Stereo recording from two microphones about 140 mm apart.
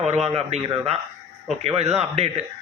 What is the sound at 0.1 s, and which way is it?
A man's voice, 50° right (ahead or behind).